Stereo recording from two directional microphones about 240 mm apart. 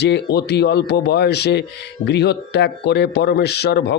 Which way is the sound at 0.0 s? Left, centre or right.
Left.